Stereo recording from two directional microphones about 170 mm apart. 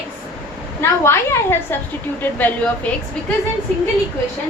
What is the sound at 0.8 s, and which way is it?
A woman's voice, 15° left (ahead or behind).